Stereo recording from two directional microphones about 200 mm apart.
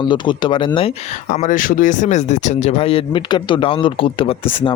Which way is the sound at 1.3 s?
40° left (ahead or behind).